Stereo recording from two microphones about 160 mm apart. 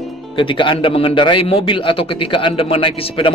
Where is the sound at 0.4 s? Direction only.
30° left (ahead or behind).